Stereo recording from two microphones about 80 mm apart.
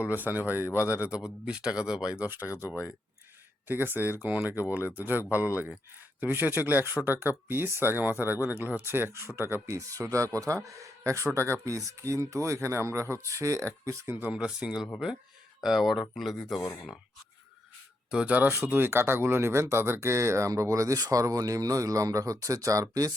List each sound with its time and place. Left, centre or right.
0.2 s speech: right
0.9 s speech: centre
3.7 s speech: right
14.3 s speech: centre
18.1 s speech: centre; by 23.1 s right